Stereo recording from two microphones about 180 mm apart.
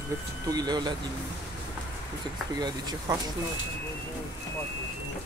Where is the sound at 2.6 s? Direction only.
20° right (ahead or behind).